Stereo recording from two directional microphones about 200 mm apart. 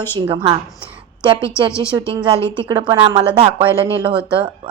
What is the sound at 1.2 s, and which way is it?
Speech, 25° right (ahead or behind).